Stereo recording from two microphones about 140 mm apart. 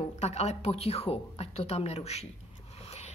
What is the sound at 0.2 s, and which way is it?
A woman's voice, 50° left (ahead or behind).